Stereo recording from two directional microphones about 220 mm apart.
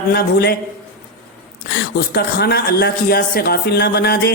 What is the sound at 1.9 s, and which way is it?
Speech, 45° left (ahead or behind).